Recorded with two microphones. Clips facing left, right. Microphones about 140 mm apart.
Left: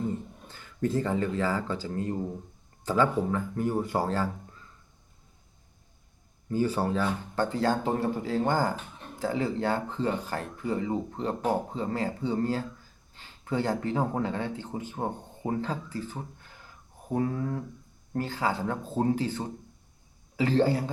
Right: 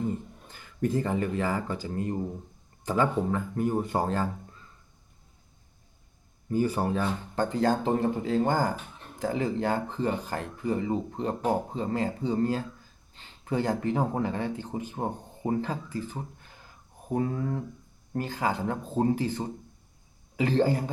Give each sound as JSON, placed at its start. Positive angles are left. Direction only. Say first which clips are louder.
{"t": 0.5, "sound": "speech", "louder": "even", "side_deg": -15}
{"t": 6.5, "sound": "speech", "louder": "even", "side_deg": -15}
{"t": 16.4, "sound": "a sound", "louder": "left 1 dB", "side_deg": -20}
{"t": 17.1, "sound": "speech", "louder": "even", "side_deg": -25}